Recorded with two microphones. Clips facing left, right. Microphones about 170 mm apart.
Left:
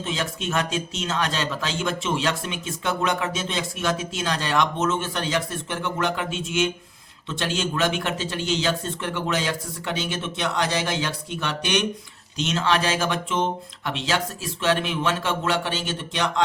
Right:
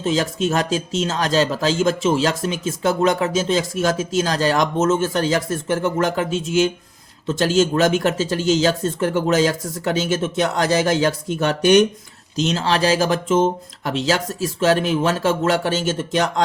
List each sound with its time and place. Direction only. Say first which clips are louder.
0.0 s speech: right 8 dB; 40° right (ahead or behind)